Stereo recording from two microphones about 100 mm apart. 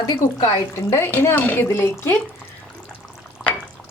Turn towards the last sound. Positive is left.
turn(degrees=0)  # may be behind; listen again after turning